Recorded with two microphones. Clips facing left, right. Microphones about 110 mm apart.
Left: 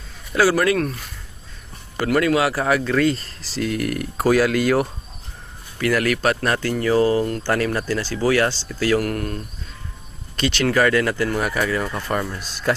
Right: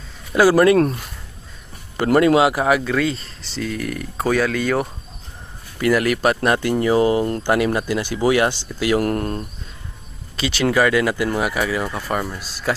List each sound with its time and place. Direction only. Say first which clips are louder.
0.5 s speech: right 6 dB; 30° right (ahead or behind)
2.1 s speech: right 4 dB; 25° right (ahead or behind)
2.9 s speech: left 2 dB; centre (ahead or behind)
5.9 s speech: right 2 dB; 10° right (ahead or behind); by 9.4 s 30° right (ahead or behind)
10.3 s speech: right 1 dB; 5° right (ahead or behind)